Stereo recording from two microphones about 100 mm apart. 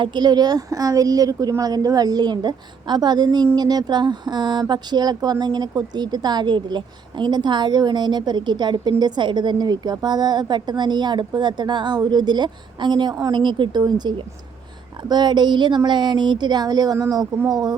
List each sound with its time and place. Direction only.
0.0 s a woman's voice: 50° right (ahead or behind)
13.3 s speech: 50° right (ahead or behind)
15.1 s a woman's voice: 45° right (ahead or behind)